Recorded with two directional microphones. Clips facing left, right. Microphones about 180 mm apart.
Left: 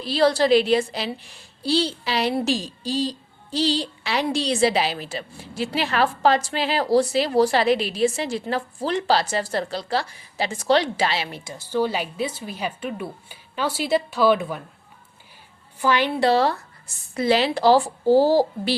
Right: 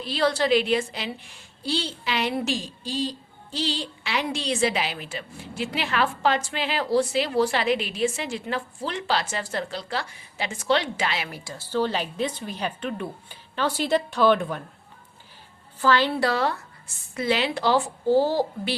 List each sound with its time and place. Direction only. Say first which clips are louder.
0.0 s a woman's voice: left 5 dB; 35° left (ahead or behind); by 14.6 s 5° left (ahead or behind)
15.8 s a woman's voice: left 1 dB; 15° left (ahead or behind)
16.3 s a woman's voice: left 5 dB; 35° left (ahead or behind)